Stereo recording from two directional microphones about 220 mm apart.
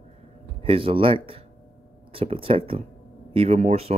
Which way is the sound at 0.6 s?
25° right (ahead or behind).